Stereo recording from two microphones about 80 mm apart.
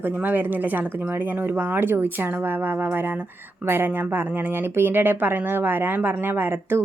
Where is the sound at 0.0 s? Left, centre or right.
Right.